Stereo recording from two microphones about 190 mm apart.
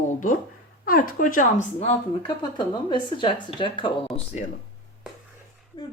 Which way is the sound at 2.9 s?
25° left (ahead or behind).